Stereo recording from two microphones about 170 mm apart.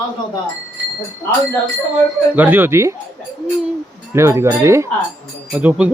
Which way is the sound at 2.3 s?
10° right (ahead or behind).